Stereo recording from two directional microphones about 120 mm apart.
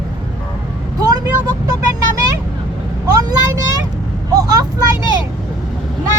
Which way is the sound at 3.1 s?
30° right (ahead or behind).